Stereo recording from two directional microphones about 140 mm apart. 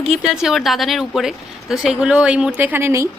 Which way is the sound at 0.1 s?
Centre (ahead or behind).